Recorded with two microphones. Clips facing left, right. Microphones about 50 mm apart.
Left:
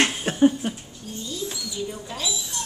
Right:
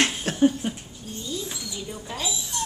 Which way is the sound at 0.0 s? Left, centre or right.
Centre.